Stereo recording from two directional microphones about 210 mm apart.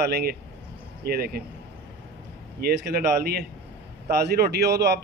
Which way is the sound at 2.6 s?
50° right (ahead or behind).